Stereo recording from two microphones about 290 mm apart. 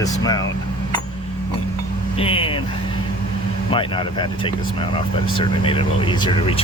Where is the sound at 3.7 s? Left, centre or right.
Centre.